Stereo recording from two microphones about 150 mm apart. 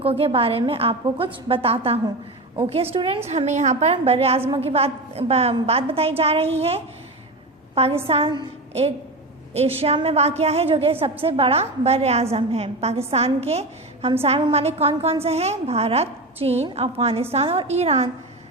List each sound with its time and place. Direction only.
0.0 s a woman's voice: 40° right (ahead or behind)
3.2 s a woman's voice: 50° right (ahead or behind)
9.6 s a woman's voice: 45° right (ahead or behind)